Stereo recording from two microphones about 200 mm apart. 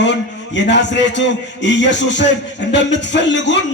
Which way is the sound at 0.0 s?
60° left (ahead or behind).